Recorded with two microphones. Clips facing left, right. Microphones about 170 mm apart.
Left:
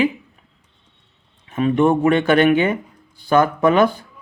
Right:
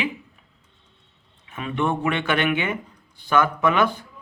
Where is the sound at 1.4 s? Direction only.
40° left (ahead or behind).